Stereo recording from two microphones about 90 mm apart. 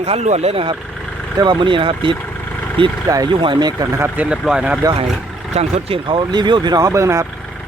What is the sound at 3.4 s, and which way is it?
Speech, 55° right (ahead or behind).